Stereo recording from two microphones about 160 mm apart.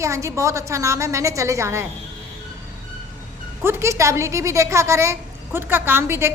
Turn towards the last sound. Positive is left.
turn(degrees=-15)  # may be behind; listen again after turning